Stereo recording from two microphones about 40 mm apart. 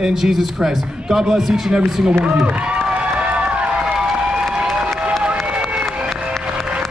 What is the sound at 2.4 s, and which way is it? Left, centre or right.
Speech, right.